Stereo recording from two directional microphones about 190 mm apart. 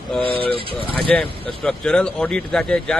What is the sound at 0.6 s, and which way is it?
Speech, 30° right (ahead or behind).